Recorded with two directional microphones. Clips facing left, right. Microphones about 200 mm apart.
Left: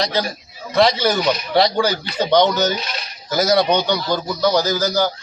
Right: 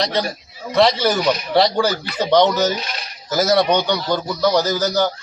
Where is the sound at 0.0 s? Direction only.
Centre (ahead or behind).